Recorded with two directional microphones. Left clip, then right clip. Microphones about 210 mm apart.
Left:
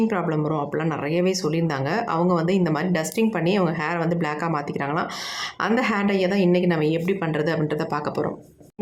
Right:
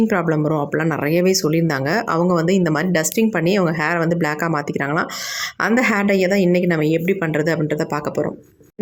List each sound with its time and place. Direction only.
0.1 s speech: 20° right (ahead or behind)